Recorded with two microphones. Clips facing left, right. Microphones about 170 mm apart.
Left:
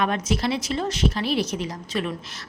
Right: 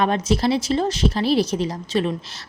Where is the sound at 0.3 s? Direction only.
35° right (ahead or behind).